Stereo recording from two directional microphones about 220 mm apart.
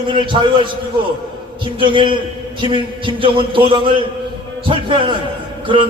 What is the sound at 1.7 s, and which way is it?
A man's voice, 20° right (ahead or behind).